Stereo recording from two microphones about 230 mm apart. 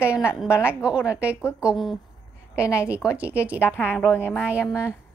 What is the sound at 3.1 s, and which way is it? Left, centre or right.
Speech, centre.